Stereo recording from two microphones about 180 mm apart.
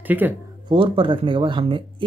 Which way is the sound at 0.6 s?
30° right (ahead or behind).